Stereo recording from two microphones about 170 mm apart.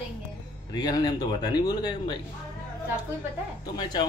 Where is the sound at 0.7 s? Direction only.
25° left (ahead or behind).